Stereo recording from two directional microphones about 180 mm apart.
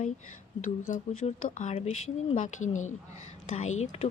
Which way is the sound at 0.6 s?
45° left (ahead or behind).